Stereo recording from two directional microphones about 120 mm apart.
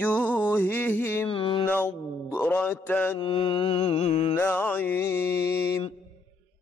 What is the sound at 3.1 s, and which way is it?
Mantra, 45° left (ahead or behind).